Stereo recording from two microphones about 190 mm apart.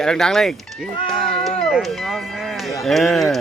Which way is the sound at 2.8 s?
Centre (ahead or behind).